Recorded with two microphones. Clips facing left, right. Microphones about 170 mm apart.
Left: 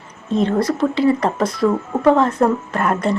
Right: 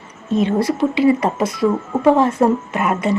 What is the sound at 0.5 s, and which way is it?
Speech, 20° right (ahead or behind).